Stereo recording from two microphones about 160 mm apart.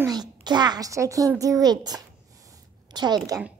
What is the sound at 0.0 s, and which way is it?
A child's voice, 25° right (ahead or behind).